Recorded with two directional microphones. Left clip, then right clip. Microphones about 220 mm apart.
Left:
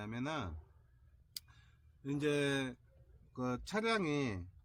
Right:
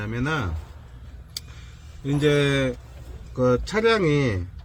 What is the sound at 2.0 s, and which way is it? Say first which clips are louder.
Speech: right 14 dB; 55° left (ahead or behind).